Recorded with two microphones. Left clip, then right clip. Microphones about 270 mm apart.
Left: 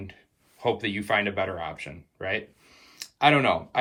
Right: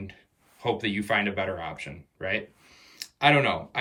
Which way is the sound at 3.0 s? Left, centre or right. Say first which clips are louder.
Left 1 dB; centre.